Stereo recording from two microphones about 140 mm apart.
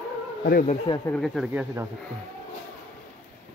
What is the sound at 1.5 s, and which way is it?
Speech, 10° right (ahead or behind).